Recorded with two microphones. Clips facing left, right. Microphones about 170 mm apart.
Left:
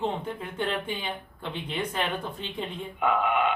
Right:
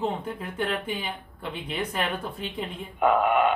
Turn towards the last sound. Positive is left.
turn(degrees=-45)  # may be behind; listen again after turning